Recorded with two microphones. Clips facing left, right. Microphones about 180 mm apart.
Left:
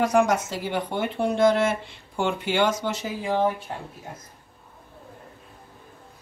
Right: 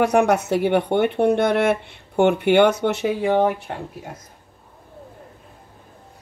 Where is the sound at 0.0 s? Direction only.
65° right (ahead or behind).